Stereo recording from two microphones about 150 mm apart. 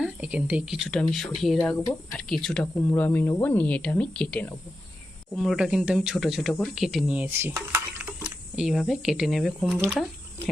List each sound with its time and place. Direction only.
0.0 s speech: 5° right (ahead or behind)
1.6 s speech: 15° left (ahead or behind)
2.1 s speech: 5° left (ahead or behind)
2.7 s speech: 15° left (ahead or behind)